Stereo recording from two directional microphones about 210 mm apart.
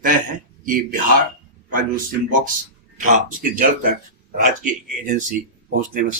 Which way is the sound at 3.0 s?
35° right (ahead or behind).